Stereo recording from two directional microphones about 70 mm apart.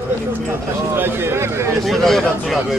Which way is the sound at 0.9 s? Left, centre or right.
Right.